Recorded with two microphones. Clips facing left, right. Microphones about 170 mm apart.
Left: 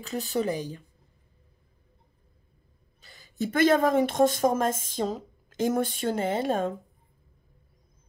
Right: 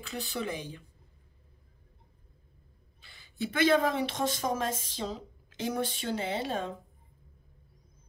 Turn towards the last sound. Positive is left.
turn(degrees=50)  # may be behind; listen again after turning